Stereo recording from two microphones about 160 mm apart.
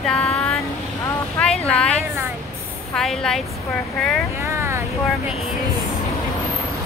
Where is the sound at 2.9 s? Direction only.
5° left (ahead or behind).